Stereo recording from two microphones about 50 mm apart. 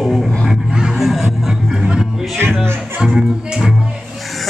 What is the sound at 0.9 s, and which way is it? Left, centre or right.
Music, centre.